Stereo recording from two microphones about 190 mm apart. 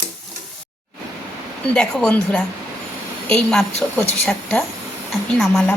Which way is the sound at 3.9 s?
10° left (ahead or behind).